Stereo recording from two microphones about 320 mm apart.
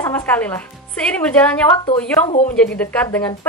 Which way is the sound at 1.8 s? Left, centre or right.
Centre.